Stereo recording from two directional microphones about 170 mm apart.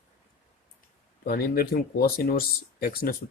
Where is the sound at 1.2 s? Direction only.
60° left (ahead or behind).